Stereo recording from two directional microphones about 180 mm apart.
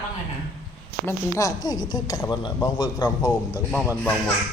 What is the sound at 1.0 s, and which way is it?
A woman's voice, 20° left (ahead or behind).